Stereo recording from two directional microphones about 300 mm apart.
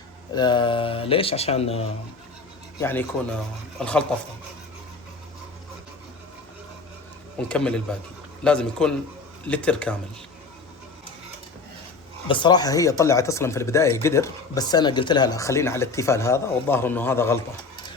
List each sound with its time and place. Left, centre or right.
0.3 s speech: centre
2.8 s a man's voice: centre
7.4 s a man's voice: centre
12.3 s speech: centre